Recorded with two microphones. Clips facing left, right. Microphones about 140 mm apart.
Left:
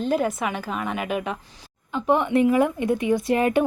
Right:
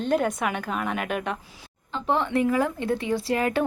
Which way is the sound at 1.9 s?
15° left (ahead or behind).